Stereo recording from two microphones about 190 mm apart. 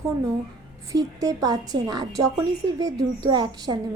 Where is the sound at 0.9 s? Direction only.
20° right (ahead or behind).